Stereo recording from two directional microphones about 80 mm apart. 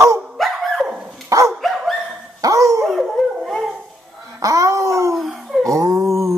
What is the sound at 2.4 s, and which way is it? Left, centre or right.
Dog, right.